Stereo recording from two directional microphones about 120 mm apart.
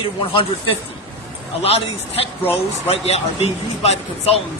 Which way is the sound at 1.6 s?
60° left (ahead or behind).